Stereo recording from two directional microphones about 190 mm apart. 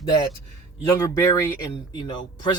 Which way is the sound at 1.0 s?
15° left (ahead or behind).